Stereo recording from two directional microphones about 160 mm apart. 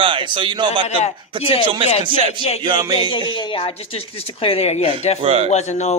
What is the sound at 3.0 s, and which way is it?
Speech, 30° left (ahead or behind).